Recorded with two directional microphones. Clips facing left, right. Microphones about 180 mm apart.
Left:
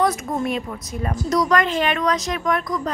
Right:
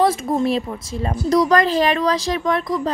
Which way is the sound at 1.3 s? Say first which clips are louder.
Right 4 dB; 30° right (ahead or behind).